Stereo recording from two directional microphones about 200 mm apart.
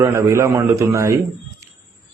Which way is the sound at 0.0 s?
15° right (ahead or behind).